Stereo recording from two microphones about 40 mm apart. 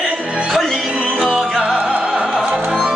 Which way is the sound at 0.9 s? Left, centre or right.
Right.